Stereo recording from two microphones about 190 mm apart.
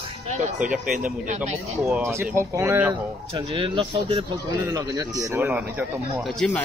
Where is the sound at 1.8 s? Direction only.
10° right (ahead or behind).